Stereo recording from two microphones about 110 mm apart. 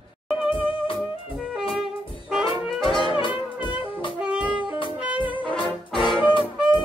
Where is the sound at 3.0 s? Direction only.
50° left (ahead or behind).